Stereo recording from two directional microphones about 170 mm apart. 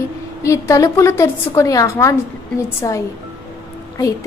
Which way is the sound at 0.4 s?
20° left (ahead or behind).